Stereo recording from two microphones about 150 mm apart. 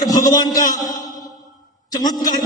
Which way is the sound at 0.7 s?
25° left (ahead or behind).